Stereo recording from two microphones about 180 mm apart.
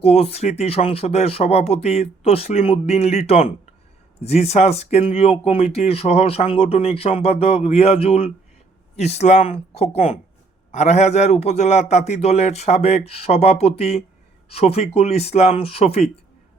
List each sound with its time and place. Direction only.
0.0 s speech: 35° left (ahead or behind)